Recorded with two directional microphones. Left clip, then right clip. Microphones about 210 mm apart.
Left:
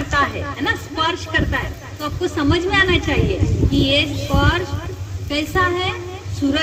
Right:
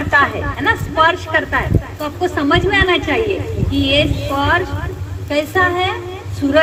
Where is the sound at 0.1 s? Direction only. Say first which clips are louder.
Right 6 dB; 45° left (ahead or behind).